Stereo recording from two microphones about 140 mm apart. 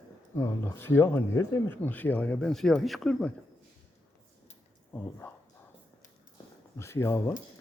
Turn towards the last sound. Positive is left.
turn(degrees=20)  # may be behind; listen again after turning